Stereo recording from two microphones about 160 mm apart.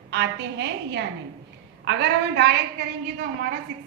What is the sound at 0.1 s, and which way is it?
A woman's voice, 90° right.